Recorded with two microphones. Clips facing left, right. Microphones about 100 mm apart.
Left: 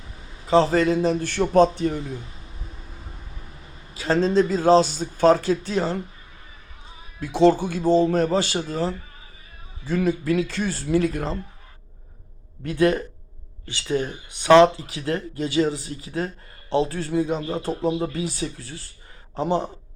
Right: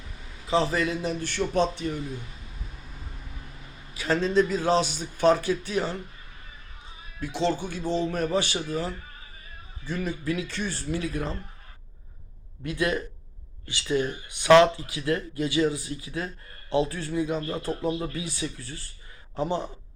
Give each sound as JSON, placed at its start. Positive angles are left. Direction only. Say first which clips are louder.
{"t": 0.4, "sound": "speech", "louder": "left 7 dB", "side_deg": 40}
{"t": 3.9, "sound": "speech", "louder": "left 4 dB", "side_deg": 35}
{"t": 7.2, "sound": "speech", "louder": "left 9 dB", "side_deg": 45}
{"t": 10.1, "sound": "speech", "louder": "left 8 dB", "side_deg": 35}
{"t": 12.6, "sound": "speech", "louder": "left 7 dB", "side_deg": 40}